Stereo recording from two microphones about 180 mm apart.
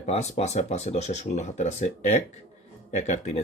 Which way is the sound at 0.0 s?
40° left (ahead or behind).